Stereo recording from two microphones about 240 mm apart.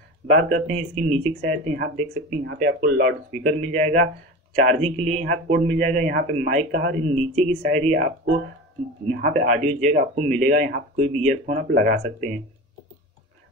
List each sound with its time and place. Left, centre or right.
0.3 s speech: right